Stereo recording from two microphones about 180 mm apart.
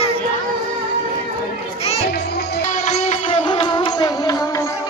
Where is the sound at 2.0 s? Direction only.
65° left (ahead or behind).